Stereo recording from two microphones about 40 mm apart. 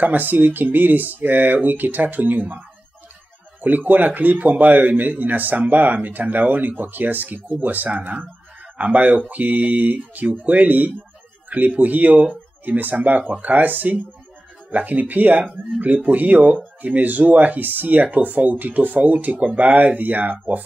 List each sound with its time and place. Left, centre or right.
0.0 s a man's voice: right
3.6 s a man's voice: right